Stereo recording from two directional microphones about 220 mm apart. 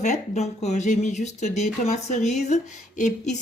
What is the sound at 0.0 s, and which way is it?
A woman's voice, 30° left (ahead or behind).